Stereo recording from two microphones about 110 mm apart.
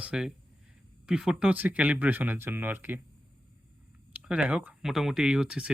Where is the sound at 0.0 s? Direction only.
10° right (ahead or behind).